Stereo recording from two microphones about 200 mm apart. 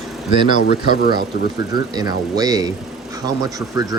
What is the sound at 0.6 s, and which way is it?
Speech, 50° left (ahead or behind).